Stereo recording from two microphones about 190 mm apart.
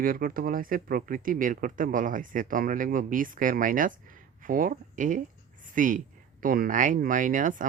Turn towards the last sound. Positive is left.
turn(degrees=-45)  # may be behind; listen again after turning